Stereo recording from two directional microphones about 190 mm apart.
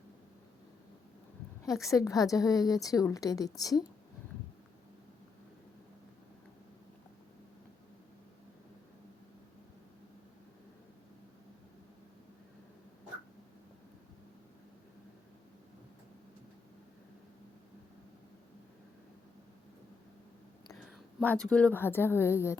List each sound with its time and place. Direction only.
1.8 s a woman's voice: 15° left (ahead or behind)
21.2 s a woman's voice: 5° left (ahead or behind)